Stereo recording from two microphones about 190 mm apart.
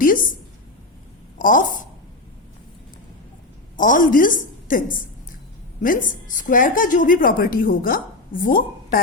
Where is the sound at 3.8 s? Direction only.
45° left (ahead or behind).